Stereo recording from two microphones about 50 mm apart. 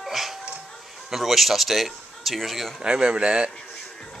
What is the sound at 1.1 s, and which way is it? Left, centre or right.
Speech, centre.